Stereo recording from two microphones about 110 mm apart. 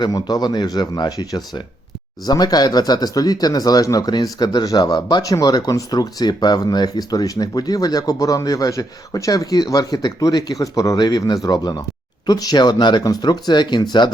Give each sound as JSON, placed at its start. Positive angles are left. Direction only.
{"t": 0.0, "sound": "speech", "side_deg": 35}